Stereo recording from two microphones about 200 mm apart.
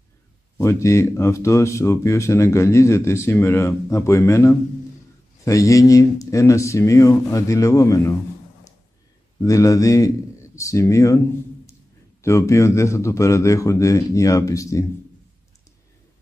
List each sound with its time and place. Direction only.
0.6 s speech: 15° left (ahead or behind)
9.4 s speech: 15° left (ahead or behind)
12.2 s speech: 15° left (ahead or behind)